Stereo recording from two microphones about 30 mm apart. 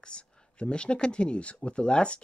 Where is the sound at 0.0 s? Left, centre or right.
Left.